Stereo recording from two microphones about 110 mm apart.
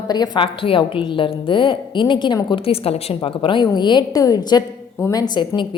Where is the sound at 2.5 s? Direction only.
60° left (ahead or behind).